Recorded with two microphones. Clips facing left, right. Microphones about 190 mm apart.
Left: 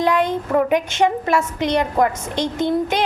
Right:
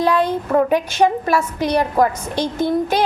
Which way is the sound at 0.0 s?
20° left (ahead or behind).